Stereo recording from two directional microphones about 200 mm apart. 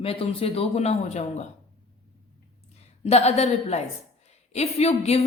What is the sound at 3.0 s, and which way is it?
A woman's voice, 30° left (ahead or behind).